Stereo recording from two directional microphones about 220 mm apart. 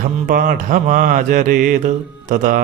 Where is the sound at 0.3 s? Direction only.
40° right (ahead or behind).